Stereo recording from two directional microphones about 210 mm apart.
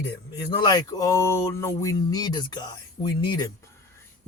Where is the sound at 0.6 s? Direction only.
20° left (ahead or behind).